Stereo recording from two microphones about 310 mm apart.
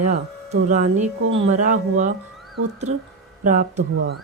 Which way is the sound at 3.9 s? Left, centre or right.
Right.